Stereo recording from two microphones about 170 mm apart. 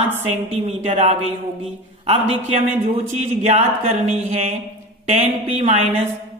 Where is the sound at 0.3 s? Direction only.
40° right (ahead or behind).